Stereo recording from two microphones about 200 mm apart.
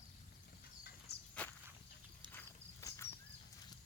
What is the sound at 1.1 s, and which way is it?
Walk, 55° left (ahead or behind).